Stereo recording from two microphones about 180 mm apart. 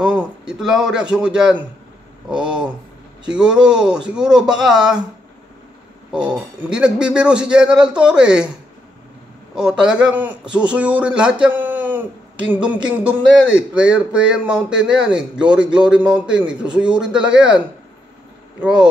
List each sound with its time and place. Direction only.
0.0 s a man's voice: 5° right (ahead or behind)
6.1 s speech: 5° right (ahead or behind)
9.6 s a man's voice: 5° right (ahead or behind)
12.4 s a sound: 5° right (ahead or behind)
13.6 s speech: 5° right (ahead or behind)